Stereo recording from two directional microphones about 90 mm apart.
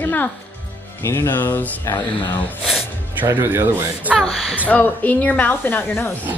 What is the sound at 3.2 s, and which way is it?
Speech, 25° right (ahead or behind).